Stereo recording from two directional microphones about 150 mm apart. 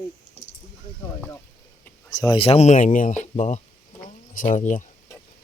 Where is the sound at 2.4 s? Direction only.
45° left (ahead or behind).